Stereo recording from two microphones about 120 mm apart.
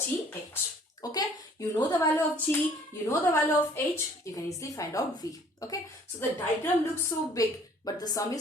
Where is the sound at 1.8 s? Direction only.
20° left (ahead or behind).